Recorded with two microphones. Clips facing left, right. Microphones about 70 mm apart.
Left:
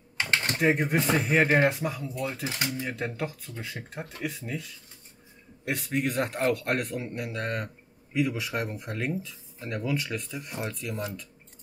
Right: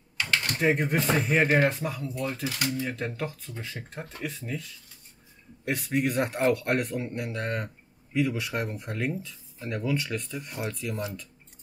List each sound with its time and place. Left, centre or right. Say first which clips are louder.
0.2 s typing: left 1 dB; left
0.6 s speech: even; centre
2.5 s speech: right 2 dB; left
2.9 s speech: even; centre
5.7 s speech: right 2 dB; centre